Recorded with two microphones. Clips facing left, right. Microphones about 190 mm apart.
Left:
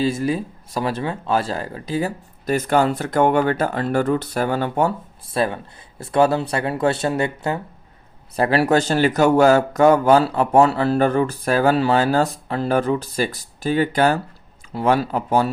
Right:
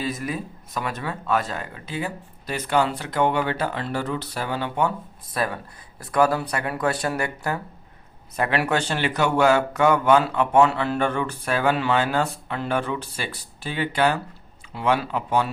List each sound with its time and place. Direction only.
0.0 s speech: 30° left (ahead or behind)
5.3 s speech: 25° left (ahead or behind)
8.4 s speech: 35° left (ahead or behind)